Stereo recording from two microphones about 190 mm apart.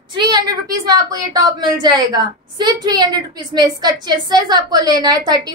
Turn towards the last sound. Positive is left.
turn(degrees=-20)  # may be behind; listen again after turning